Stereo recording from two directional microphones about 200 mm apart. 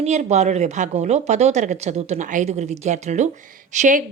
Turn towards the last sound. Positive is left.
turn(degrees=-40)  # may be behind; listen again after turning